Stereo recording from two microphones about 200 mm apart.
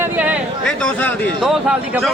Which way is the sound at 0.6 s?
5° left (ahead or behind).